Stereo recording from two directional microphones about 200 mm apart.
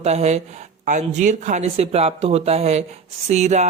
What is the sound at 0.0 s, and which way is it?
Speech, 35° right (ahead or behind).